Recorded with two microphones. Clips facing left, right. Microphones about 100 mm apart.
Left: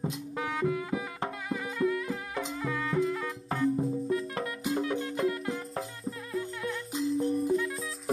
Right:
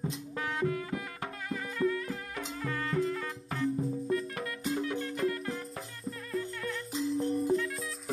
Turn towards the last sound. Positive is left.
turn(degrees=0)  # may be behind; listen again after turning